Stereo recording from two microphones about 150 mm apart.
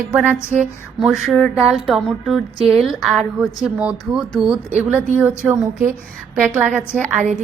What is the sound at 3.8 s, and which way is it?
Speech, 10° right (ahead or behind).